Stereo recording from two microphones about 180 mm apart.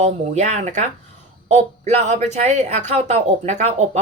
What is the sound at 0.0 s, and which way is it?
A woman's voice, 40° right (ahead or behind).